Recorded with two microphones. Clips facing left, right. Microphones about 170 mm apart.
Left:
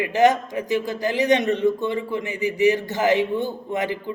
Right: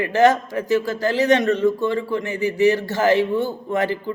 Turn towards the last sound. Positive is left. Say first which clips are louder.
# right 3 dB
turn(degrees=15)  # may be behind; listen again after turning